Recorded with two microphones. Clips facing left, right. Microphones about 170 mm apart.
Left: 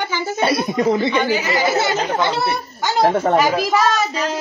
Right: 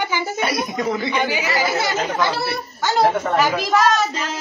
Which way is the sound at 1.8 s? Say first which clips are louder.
Left 2 dB; 25° left (ahead or behind).